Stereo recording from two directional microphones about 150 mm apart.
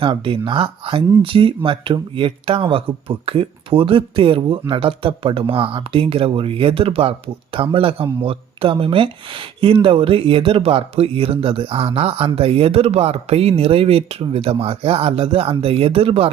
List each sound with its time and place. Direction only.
0.0 s speech: 35° right (ahead or behind)